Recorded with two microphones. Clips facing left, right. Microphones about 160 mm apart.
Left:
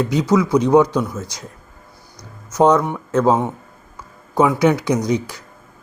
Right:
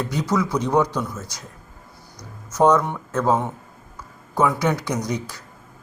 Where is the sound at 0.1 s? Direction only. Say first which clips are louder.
Left 6 dB; 15° left (ahead or behind).